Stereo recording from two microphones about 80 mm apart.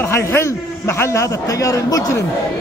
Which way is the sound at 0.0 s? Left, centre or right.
Left.